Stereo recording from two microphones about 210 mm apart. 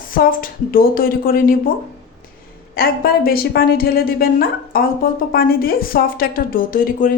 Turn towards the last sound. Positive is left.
turn(degrees=40)  # may be behind; listen again after turning